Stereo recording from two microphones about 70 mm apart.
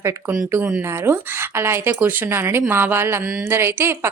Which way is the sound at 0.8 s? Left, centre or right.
Right.